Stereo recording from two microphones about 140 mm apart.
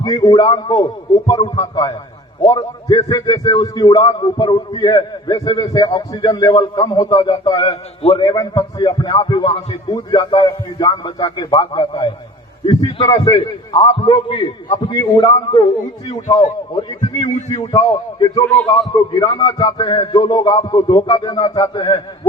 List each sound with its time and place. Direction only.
0.0 s a man's voice: 30° left (ahead or behind)
13.4 s a man's voice: 40° left (ahead or behind)
17.2 s a man's voice: 55° left (ahead or behind)
17.7 s a man's voice: 30° left (ahead or behind)
18.5 s a man's voice: 5° left (ahead or behind)
18.9 s a man's voice: 35° left (ahead or behind)